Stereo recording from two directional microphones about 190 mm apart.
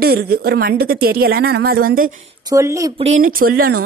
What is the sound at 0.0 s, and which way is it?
A woman's voice, 55° right (ahead or behind).